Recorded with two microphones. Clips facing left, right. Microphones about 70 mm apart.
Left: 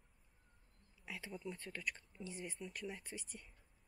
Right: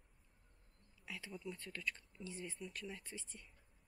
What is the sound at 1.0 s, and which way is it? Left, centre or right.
Speech, centre.